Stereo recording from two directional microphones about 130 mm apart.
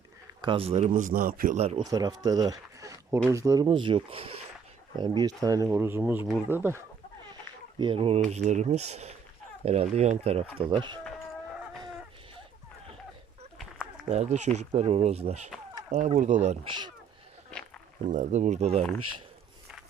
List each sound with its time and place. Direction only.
0.4 s speech: 45° right (ahead or behind)
0.9 s a man's voice: 90° right
1.7 s speech: 30° right (ahead or behind)
3.7 s speech: 40° right (ahead or behind)
4.9 s speech: 30° right (ahead or behind); by 6.8 s 15° right (ahead or behind)
7.8 s speech: 40° right (ahead or behind)
8.2 s speech: 60° right (ahead or behind)
10.6 s speech: 40° right (ahead or behind)
14.1 s speech: 60° right (ahead or behind)
16.6 s speech: 35° right (ahead or behind)
18.1 s speech: 65° right (ahead or behind)